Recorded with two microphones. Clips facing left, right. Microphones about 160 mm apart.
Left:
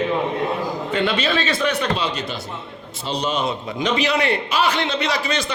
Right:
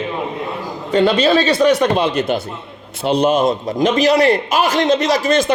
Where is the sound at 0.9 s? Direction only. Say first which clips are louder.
Right 10 dB; 40° right (ahead or behind).